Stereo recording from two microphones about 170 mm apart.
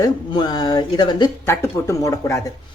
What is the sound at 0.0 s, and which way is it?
Speech, 25° left (ahead or behind).